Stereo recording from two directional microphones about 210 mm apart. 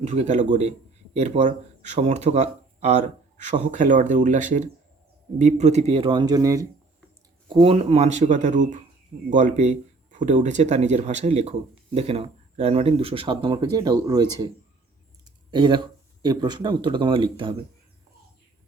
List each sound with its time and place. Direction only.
0.0 s speech: 30° right (ahead or behind)